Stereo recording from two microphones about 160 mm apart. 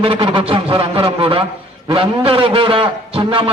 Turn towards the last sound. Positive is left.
turn(degrees=-35)  # may be behind; listen again after turning